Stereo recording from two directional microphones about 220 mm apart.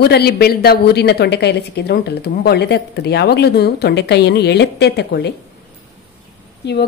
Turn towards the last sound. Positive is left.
turn(degrees=50)  # may be behind; listen again after turning